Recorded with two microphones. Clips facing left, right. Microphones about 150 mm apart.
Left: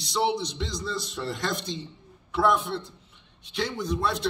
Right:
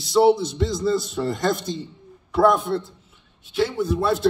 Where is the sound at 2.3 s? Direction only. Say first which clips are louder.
Right 6 dB; 45° right (ahead or behind).